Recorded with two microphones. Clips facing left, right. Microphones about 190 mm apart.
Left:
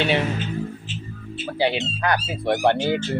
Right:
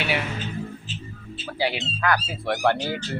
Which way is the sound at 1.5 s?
25° left (ahead or behind).